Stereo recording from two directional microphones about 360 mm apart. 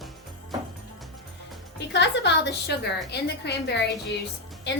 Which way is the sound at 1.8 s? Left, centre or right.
Left.